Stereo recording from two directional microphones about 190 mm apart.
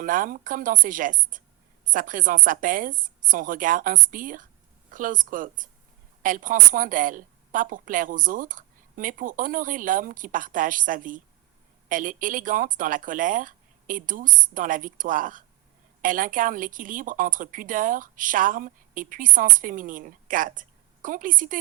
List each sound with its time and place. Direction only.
0.0 s a woman's voice: 45° right (ahead or behind)